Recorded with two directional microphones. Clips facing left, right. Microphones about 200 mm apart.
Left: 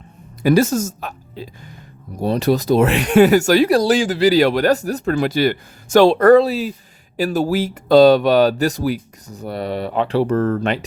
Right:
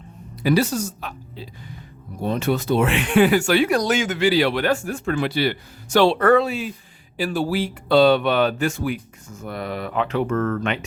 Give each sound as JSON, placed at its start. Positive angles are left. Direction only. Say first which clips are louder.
{"t": 0.4, "sound": "speech", "louder": "left 5 dB", "side_deg": 45}